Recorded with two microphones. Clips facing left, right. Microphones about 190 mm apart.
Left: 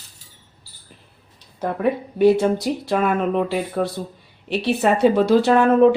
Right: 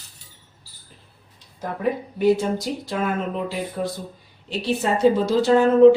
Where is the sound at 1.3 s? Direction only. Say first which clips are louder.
Left 6 dB; 65° left (ahead or behind).